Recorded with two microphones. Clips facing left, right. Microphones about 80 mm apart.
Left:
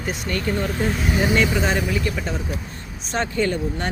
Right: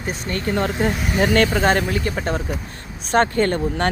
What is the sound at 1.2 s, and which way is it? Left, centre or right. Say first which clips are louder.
Speech: right 3 dB; right.